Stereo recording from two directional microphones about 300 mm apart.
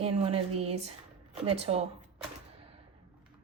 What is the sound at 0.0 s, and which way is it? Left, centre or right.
Speech, centre.